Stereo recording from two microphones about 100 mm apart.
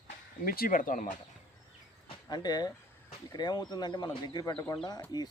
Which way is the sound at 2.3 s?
45° left (ahead or behind).